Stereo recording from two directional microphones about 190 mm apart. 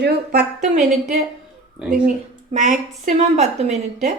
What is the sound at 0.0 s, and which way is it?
Speech, 55° right (ahead or behind).